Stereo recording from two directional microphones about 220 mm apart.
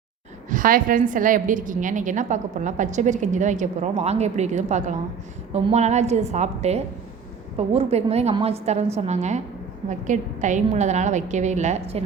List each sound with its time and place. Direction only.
0.5 s a woman's voice: 40° right (ahead or behind)